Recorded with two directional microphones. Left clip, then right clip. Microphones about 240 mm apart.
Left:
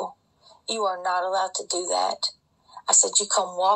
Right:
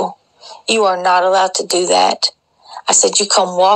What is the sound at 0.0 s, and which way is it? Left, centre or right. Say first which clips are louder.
Speech: right 13 dB; right.